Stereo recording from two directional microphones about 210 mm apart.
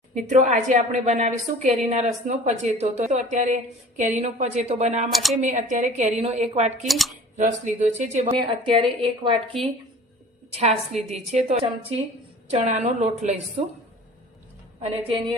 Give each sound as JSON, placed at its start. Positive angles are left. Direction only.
{"t": 0.1, "sound": "a woman's voice", "side_deg": -35}
{"t": 5.1, "sound": "speech", "side_deg": 0}
{"t": 5.4, "sound": "a woman's voice", "side_deg": -35}
{"t": 6.8, "sound": "speech", "side_deg": 0}
{"t": 7.3, "sound": "a woman's voice", "side_deg": -35}
{"t": 8.4, "sound": "a woman's voice", "side_deg": -25}
{"t": 11.1, "sound": "a woman's voice", "side_deg": -30}
{"t": 14.8, "sound": "a woman's voice", "side_deg": -30}